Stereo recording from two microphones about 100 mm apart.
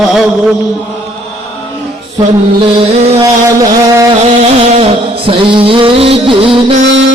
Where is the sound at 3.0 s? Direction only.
90° right.